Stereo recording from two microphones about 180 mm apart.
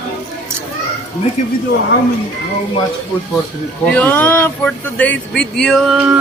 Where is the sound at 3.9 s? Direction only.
10° left (ahead or behind); by 6.2 s 5° right (ahead or behind).